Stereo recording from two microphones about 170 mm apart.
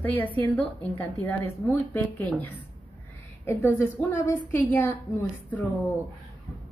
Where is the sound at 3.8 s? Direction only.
10° right (ahead or behind).